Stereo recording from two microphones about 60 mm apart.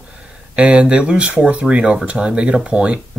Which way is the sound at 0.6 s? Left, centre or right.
Centre.